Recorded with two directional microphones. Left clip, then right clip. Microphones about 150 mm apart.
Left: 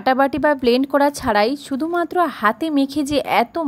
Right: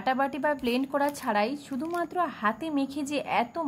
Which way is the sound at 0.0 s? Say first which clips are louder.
Left 10 dB; 50° left (ahead or behind).